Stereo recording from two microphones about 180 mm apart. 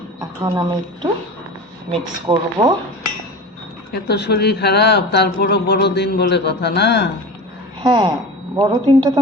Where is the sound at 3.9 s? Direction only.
65° left (ahead or behind).